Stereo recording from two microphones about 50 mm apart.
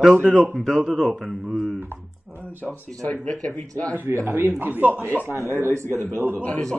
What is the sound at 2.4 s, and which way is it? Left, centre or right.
Speech, right.